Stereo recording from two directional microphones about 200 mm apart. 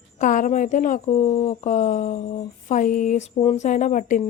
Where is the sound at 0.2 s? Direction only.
40° left (ahead or behind).